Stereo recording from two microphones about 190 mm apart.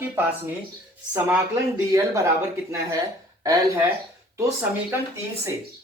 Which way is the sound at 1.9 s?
15° right (ahead or behind).